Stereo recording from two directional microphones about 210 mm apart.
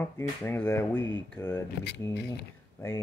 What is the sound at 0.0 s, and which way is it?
Mantra, 10° left (ahead or behind).